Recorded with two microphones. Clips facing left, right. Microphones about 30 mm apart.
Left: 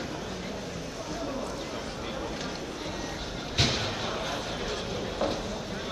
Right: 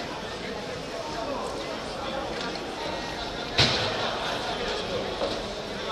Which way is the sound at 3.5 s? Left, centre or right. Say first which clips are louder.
Right 4 dB; right.